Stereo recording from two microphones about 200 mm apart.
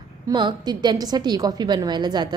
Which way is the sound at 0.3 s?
20° right (ahead or behind).